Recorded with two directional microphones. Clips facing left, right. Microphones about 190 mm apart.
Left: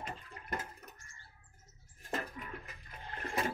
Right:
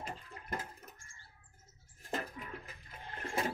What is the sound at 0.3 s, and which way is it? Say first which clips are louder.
Toilet flush: left 1 dB; 25° right (ahead or behind).